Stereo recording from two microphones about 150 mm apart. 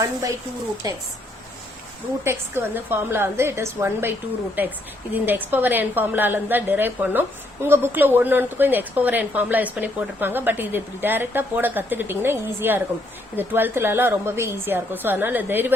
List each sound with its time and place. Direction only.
0.0 s speech: 20° right (ahead or behind)
2.2 s a woman's voice: 15° right (ahead or behind)